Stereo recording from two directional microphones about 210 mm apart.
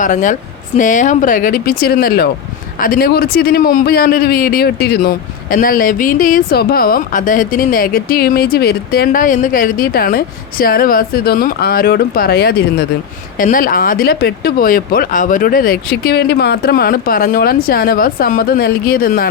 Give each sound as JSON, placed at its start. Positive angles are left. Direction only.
{"t": 0.0, "sound": "a man's voice", "side_deg": 40}